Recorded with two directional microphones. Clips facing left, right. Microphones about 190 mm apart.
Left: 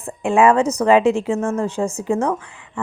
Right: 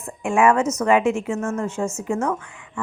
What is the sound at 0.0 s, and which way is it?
A woman's voice, 35° left (ahead or behind).